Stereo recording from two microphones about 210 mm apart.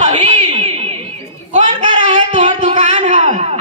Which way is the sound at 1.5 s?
30° right (ahead or behind).